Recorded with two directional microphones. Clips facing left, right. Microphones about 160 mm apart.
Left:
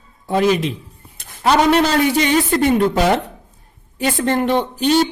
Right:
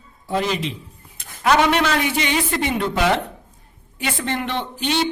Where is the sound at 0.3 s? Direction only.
55° left (ahead or behind).